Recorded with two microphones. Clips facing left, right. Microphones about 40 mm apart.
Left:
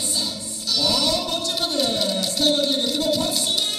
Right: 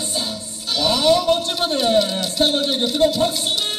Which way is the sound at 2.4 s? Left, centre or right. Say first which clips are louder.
Right 2 dB; right.